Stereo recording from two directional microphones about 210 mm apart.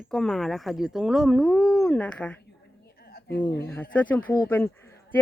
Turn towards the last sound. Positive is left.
turn(degrees=10)  # may be behind; listen again after turning